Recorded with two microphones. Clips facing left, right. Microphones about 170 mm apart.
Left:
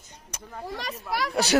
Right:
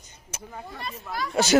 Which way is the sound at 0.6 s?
90° left.